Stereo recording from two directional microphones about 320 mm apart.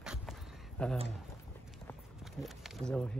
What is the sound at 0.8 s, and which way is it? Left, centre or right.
Speech, centre.